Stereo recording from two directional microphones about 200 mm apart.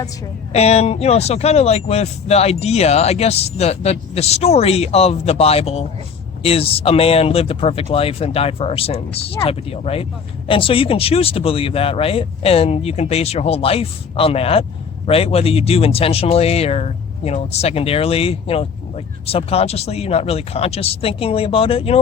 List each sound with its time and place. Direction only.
0.5 s speech: 30° left (ahead or behind)